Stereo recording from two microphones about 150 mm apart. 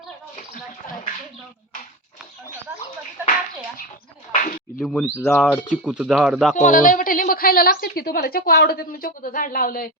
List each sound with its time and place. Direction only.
3.2 s a sound: 60° left (ahead or behind)
4.8 s speech: 5° left (ahead or behind)
5.7 s speech: 10° right (ahead or behind)
6.6 s a woman's voice: 60° left (ahead or behind)